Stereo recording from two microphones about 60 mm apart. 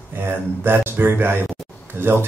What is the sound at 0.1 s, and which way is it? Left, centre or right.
Speech, right.